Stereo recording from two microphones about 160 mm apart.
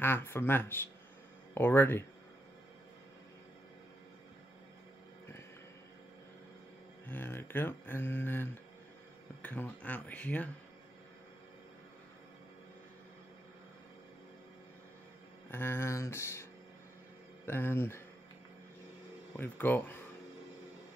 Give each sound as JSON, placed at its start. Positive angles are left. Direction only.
{"t": 0.0, "sound": "speech", "side_deg": 15}
{"t": 7.1, "sound": "speech", "side_deg": 15}
{"t": 15.5, "sound": "speech", "side_deg": 15}
{"t": 17.5, "sound": "speech", "side_deg": 15}
{"t": 19.3, "sound": "speech", "side_deg": 10}